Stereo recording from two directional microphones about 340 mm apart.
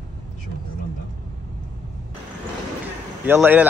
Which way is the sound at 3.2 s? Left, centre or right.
Centre.